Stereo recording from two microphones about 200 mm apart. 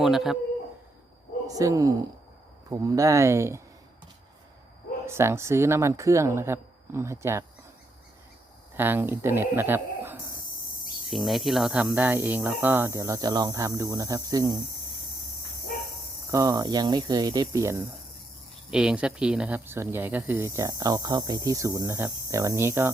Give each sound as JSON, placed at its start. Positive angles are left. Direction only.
{"t": 0.0, "sound": "speech", "side_deg": 0}
{"t": 1.5, "sound": "speech", "side_deg": -15}
{"t": 5.0, "sound": "speech", "side_deg": -15}
{"t": 8.7, "sound": "speech", "side_deg": -10}
{"t": 16.3, "sound": "speech", "side_deg": -15}
{"t": 18.7, "sound": "speech", "side_deg": -5}